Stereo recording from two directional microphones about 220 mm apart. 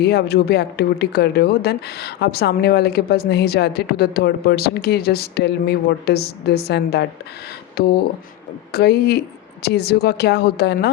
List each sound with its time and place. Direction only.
0.0 s speech: 50° left (ahead or behind)